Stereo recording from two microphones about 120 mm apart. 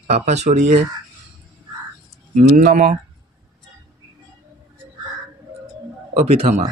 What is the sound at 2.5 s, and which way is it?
Speech, 90° right.